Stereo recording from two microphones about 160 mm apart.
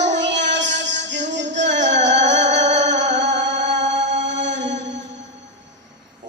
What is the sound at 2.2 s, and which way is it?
Music, 50° right (ahead or behind).